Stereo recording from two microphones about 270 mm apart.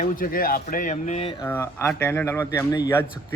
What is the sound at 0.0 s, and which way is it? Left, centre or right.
A man's voice, left.